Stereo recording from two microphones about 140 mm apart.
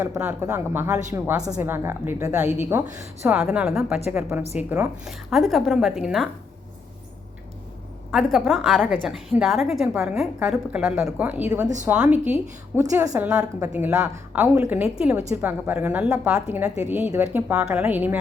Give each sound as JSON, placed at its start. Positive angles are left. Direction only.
{"t": 0.2, "sound": "a woman's voice", "side_deg": -10}
{"t": 5.0, "sound": "a woman's voice", "side_deg": 0}
{"t": 8.1, "sound": "a woman's voice", "side_deg": 0}